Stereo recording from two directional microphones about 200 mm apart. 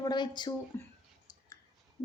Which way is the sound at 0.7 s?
10° left (ahead or behind).